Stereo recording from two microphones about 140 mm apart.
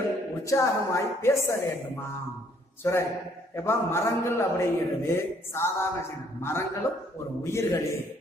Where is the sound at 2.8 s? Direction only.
20° left (ahead or behind).